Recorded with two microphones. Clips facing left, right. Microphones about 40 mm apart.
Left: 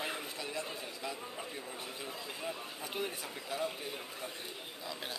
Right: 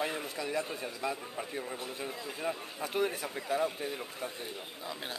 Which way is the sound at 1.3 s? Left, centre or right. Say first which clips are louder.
Right 5 dB; right.